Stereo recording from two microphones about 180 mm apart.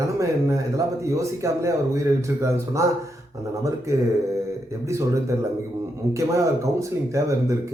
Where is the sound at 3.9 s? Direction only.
15° right (ahead or behind).